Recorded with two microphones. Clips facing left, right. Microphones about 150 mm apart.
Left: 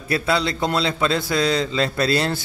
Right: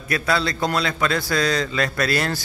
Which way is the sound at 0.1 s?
25° left (ahead or behind).